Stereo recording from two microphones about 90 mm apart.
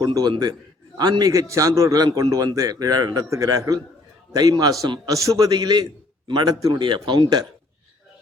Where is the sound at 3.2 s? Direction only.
35° right (ahead or behind).